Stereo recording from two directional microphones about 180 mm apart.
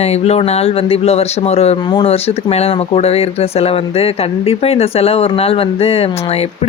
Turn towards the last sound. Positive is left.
turn(degrees=35)  # may be behind; listen again after turning